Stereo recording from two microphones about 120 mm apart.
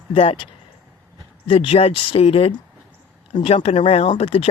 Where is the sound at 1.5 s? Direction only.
50° left (ahead or behind).